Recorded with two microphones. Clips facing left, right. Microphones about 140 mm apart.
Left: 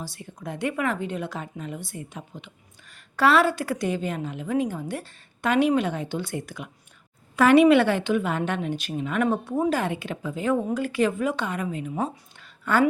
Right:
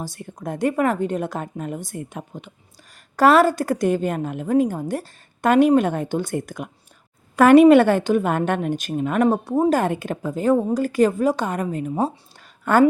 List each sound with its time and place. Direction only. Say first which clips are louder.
0.0 s a woman's voice: right 5 dB; 50° right (ahead or behind)